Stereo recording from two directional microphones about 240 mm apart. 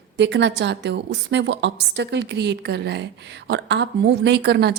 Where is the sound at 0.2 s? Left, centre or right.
Right.